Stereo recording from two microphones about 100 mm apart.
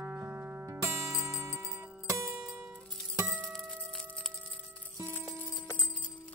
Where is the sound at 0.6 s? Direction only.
30° right (ahead or behind).